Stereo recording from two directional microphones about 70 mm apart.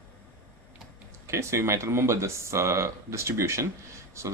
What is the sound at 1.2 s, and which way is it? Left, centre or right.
Speech, right.